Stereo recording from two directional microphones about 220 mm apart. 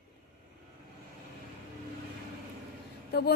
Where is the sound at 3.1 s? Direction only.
45° left (ahead or behind).